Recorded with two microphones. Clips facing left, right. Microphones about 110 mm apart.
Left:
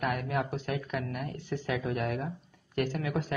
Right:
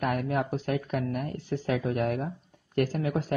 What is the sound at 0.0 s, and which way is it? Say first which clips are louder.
Speech: right 3 dB; 40° right (ahead or behind).